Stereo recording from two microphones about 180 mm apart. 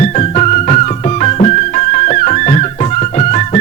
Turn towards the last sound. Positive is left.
turn(degrees=40)  # may be behind; listen again after turning